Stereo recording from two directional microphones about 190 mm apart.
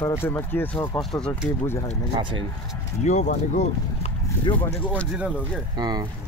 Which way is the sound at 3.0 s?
35° left (ahead or behind).